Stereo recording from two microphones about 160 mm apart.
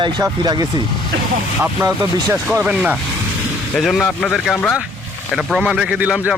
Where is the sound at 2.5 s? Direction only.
5° right (ahead or behind).